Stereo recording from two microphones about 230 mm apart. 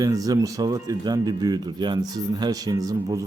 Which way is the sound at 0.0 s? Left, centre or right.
Centre.